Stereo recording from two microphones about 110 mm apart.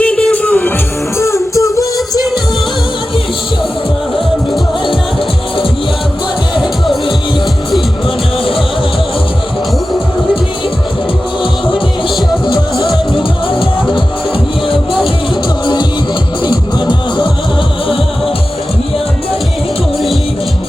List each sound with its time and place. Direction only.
0.0 s music: 10° left (ahead or behind)
1.2 s music: 25° left (ahead or behind)
6.6 s music: centre (ahead or behind)
11.7 s music: 45° left (ahead or behind)
12.7 s music: centre (ahead or behind)
13.1 s music: 50° left (ahead or behind)
15.6 s music: 45° left (ahead or behind)